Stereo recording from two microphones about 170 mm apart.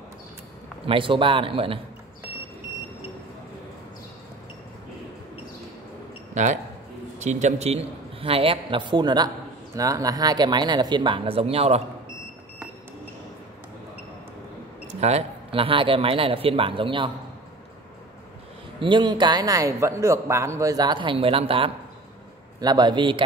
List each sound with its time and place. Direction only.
0.8 s a man's voice: 30° right (ahead or behind)
6.3 s a man's voice: 45° right (ahead or behind)
14.9 s a man's voice: 40° right (ahead or behind)
18.8 s a man's voice: 30° right (ahead or behind)